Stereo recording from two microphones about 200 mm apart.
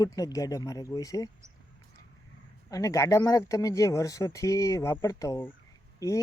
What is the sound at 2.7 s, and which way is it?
Speech, 15° left (ahead or behind).